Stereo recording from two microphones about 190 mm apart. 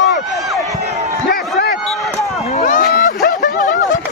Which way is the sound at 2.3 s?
35° left (ahead or behind).